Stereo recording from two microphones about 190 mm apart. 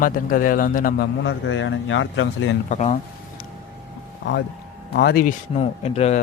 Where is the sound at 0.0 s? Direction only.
45° left (ahead or behind).